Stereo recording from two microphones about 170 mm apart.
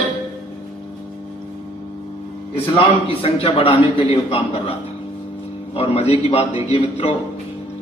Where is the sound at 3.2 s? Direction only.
35° left (ahead or behind).